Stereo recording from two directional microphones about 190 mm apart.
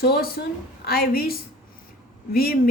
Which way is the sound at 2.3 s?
50° left (ahead or behind).